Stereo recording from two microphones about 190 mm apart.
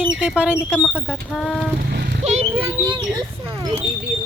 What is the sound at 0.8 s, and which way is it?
Speech, 10° left (ahead or behind).